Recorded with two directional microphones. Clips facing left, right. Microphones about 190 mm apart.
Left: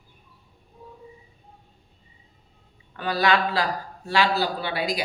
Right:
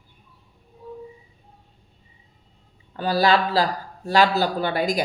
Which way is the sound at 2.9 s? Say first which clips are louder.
Right 3 dB; 35° right (ahead or behind).